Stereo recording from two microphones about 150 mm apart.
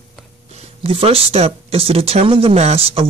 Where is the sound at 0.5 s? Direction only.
45° right (ahead or behind).